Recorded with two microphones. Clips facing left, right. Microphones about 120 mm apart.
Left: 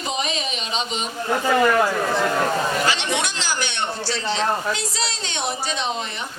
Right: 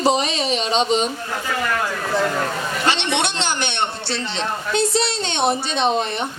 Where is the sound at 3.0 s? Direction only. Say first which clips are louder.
Right 3 dB; 65° right (ahead or behind).